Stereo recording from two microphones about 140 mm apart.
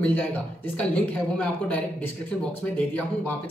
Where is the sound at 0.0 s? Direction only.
10° left (ahead or behind).